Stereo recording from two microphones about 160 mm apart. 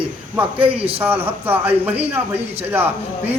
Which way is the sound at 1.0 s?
10° right (ahead or behind).